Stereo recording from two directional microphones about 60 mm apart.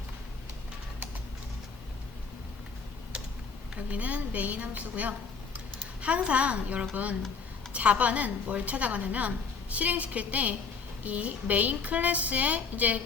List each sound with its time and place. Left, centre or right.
3.8 s a woman's voice: right